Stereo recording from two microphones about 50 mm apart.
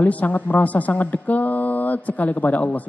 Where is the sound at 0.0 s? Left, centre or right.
Left.